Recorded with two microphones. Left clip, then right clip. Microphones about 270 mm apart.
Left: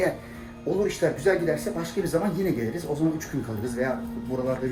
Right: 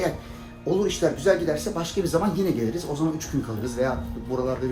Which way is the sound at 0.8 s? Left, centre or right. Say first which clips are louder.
Even; centre.